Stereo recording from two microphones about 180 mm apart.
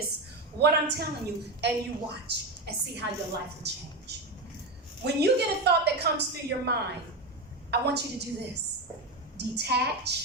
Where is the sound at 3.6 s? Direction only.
70° right (ahead or behind).